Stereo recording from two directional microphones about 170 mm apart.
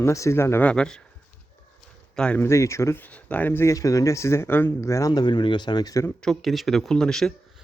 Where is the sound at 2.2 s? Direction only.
10° left (ahead or behind).